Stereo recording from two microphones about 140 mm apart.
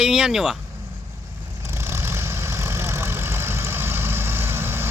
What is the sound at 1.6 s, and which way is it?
Vehicle, 20° right (ahead or behind).